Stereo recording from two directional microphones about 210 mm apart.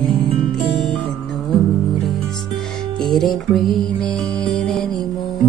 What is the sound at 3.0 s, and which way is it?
Music, centre (ahead or behind).